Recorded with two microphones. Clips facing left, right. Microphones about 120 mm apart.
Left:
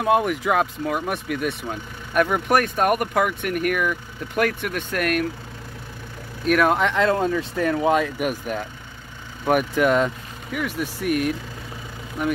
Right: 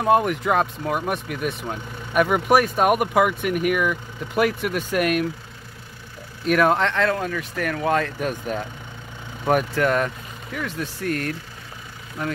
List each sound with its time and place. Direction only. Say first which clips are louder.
0.0 s speech: right 1 dB; centre (ahead or behind)
6.4 s speech: even; centre (ahead or behind)
7.0 s speech: left 3 dB; 25° left (ahead or behind)